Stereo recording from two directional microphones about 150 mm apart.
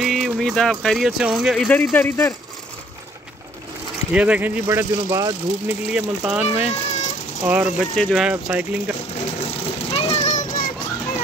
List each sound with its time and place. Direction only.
0.0 s speech: centre (ahead or behind)
1.7 s speech: 15° left (ahead or behind)
4.1 s speech: 10° right (ahead or behind)
5.9 s speech: 5° right (ahead or behind)
6.4 s speech: 45° left (ahead or behind)
7.4 s speech: 10° right (ahead or behind)
7.9 s speech: 5° left (ahead or behind)
8.3 s speech: 10° right (ahead or behind)
9.1 s a sound: 45° left (ahead or behind)